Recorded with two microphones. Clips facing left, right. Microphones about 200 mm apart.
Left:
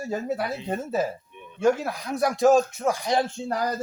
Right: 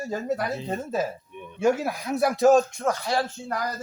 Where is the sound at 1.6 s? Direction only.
10° right (ahead or behind); by 3.3 s 20° left (ahead or behind).